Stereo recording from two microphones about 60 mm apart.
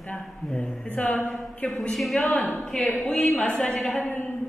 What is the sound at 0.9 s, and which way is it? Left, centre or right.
Speech, left.